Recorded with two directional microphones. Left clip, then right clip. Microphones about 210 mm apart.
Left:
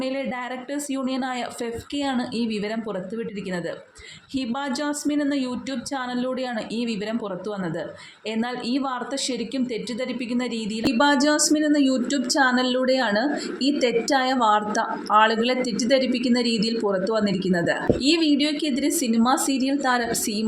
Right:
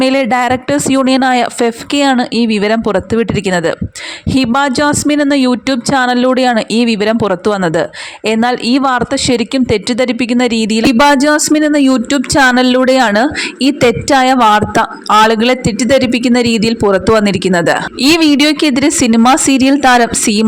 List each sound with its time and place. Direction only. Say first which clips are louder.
0.0 s speech: right 17 dB; 50° right (ahead or behind)